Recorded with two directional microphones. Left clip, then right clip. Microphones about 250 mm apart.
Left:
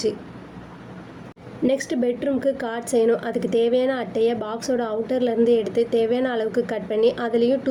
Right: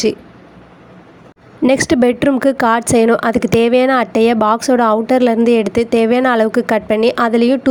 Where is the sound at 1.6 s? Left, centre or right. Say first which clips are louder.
Right 10 dB; right.